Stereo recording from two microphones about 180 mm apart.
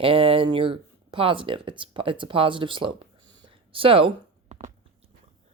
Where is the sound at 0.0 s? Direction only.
30° right (ahead or behind).